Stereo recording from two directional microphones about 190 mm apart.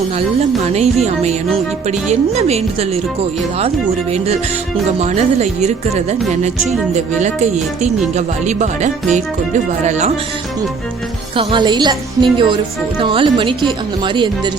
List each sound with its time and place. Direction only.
0.3 s speech: 35° right (ahead or behind)
4.9 s speech: 35° right (ahead or behind)
11.3 s speech: 25° right (ahead or behind)